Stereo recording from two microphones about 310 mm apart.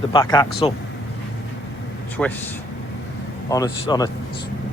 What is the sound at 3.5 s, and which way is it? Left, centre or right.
Speech, centre.